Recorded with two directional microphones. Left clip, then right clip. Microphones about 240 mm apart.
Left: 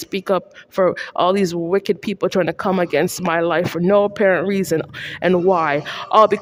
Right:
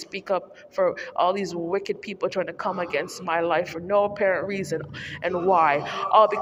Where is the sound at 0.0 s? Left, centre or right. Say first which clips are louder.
Left 7 dB; left.